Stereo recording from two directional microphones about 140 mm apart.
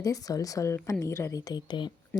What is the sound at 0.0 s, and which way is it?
Speech, 25° left (ahead or behind).